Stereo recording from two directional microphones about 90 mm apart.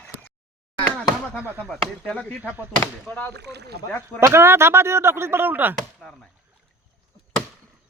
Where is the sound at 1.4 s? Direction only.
20° right (ahead or behind).